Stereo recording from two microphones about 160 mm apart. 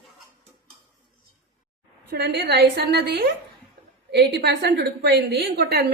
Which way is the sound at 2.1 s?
90° right.